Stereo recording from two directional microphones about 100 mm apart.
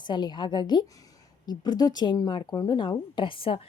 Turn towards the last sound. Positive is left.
turn(degrees=65)  # may be behind; listen again after turning